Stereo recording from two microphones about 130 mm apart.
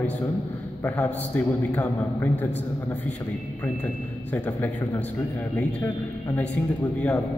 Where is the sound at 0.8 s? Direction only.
10° left (ahead or behind).